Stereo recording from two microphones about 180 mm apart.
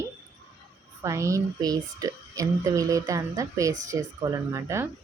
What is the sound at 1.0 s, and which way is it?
Speech, 15° right (ahead or behind).